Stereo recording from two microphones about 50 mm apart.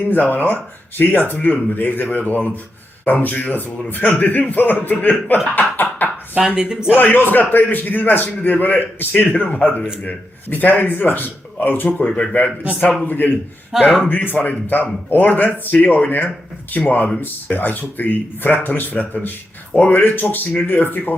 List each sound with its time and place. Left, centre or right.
0.0 s a man's voice: left
6.6 s speech: centre
6.9 s a man's voice: left
12.1 s speech: left
13.1 s a man's voice: left
13.7 s speech: centre
14.3 s a man's voice: left